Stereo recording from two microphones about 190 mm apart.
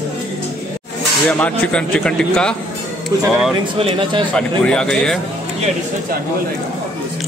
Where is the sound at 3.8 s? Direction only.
25° right (ahead or behind).